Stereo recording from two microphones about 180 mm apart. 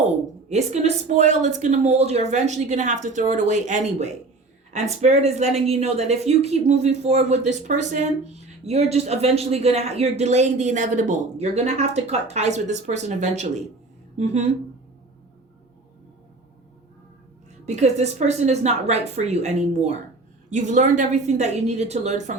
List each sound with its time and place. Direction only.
0.4 s a woman's voice: 40° right (ahead or behind)
17.7 s a woman's voice: 40° right (ahead or behind)